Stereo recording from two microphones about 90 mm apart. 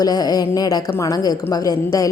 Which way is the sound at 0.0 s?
45° left (ahead or behind).